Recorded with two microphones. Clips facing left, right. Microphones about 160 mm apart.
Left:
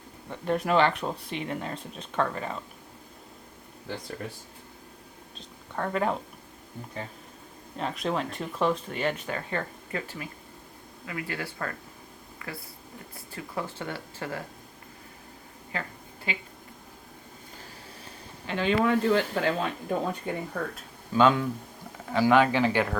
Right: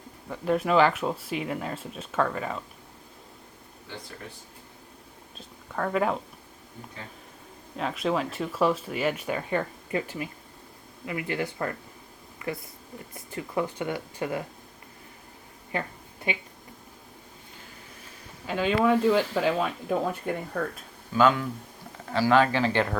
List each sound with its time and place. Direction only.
0.3 s speech: centre (ahead or behind)
5.7 s speech: 5° right (ahead or behind)
7.8 s speech: centre (ahead or behind); by 11.7 s 20° right (ahead or behind)
13.1 s speech: 20° right (ahead or behind)
16.3 s speech: 20° right (ahead or behind)
18.4 s speech: 10° right (ahead or behind)
21.1 s speech: 25° left (ahead or behind)